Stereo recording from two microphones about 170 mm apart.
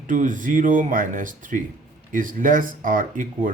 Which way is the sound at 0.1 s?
50° right (ahead or behind).